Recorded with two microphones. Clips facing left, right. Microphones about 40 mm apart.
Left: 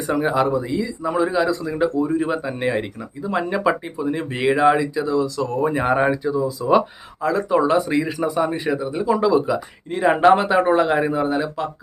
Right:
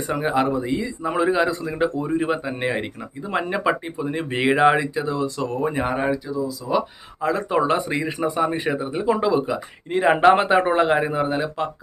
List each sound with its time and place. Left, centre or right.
0.1 s speech: centre
0.5 s speech: right
5.5 s speech: centre
5.9 s speech: centre
6.2 s speech: left
7.2 s speech: right
7.9 s speech: centre
8.5 s speech: right